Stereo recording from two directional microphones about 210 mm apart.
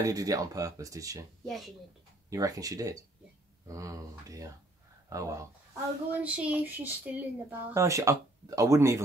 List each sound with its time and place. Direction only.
0.0 s speech: 15° right (ahead or behind)
1.4 s speech: centre (ahead or behind)
2.2 s speech: 15° right (ahead or behind)